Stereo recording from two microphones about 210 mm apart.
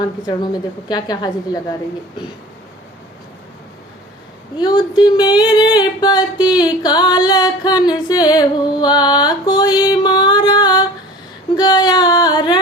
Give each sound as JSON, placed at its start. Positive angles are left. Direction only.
{"t": 0.0, "sound": "music", "side_deg": 20}
{"t": 4.5, "sound": "music", "side_deg": 20}
{"t": 11.5, "sound": "speech", "side_deg": 20}